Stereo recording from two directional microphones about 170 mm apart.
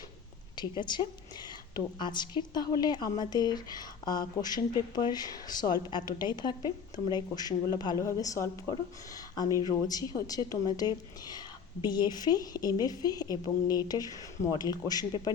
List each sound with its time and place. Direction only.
0.5 s a woman's voice: 25° left (ahead or behind)